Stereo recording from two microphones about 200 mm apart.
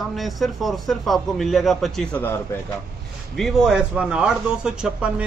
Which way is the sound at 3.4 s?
Centre (ahead or behind).